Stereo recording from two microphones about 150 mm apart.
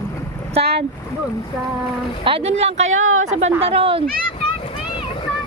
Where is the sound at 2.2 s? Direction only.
40° right (ahead or behind).